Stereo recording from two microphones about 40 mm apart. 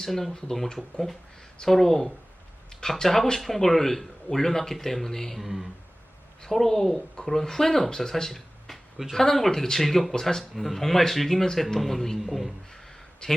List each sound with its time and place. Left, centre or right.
0.0 s a man's voice: centre
5.4 s a man's voice: centre
6.4 s a man's voice: centre
9.1 s a man's voice: centre
13.2 s a man's voice: centre